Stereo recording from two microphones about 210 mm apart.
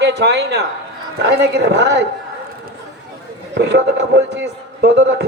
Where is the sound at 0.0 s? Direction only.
55° right (ahead or behind).